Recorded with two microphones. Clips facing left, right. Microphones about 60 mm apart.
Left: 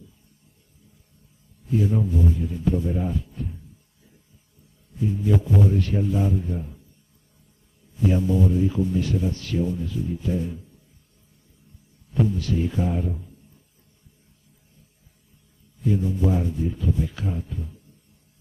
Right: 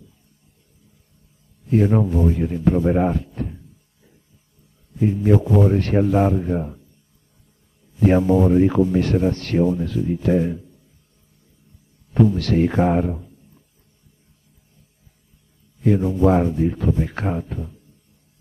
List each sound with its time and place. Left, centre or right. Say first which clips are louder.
1.7 s speech: right 6 dB; right
4.9 s speech: right 6 dB; right
8.0 s speech: right 6 dB; right
12.1 s speech: right 6 dB; right
15.8 s speech: right 7 dB; right